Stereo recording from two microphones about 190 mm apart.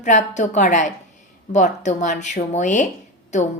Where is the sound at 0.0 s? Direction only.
40° left (ahead or behind).